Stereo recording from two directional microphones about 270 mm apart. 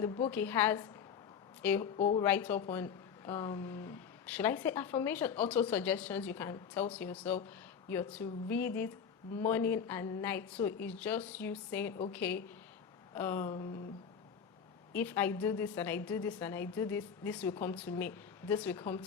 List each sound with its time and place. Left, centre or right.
0.0 s speech: centre
2.0 s speech: left
2.2 s a woman's voice: centre
14.9 s speech: centre